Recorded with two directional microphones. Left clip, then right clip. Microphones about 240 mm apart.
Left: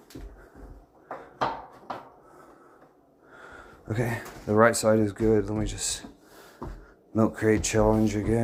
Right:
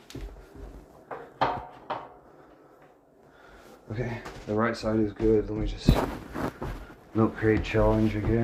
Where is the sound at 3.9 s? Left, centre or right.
Left.